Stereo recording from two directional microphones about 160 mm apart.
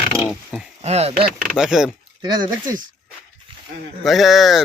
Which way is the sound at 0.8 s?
40° right (ahead or behind).